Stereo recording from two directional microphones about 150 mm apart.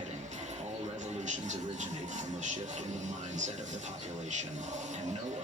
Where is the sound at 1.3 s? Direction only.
55° right (ahead or behind).